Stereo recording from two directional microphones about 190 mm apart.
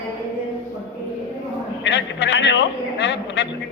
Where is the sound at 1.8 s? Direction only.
65° left (ahead or behind).